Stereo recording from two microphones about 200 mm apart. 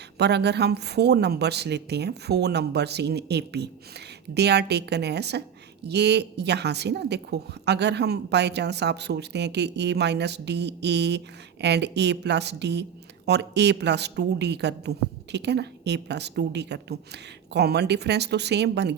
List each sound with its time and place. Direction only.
0.2 s a woman's voice: 55° right (ahead or behind)